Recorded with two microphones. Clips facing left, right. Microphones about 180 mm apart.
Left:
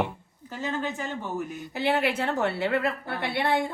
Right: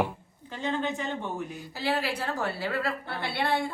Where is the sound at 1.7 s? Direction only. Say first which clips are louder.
Left 5 dB; 20° left (ahead or behind).